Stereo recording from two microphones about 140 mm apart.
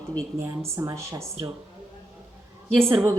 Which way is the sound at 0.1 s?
20° right (ahead or behind).